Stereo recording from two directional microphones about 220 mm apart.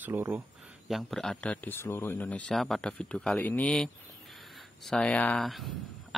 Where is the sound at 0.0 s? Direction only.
10° right (ahead or behind).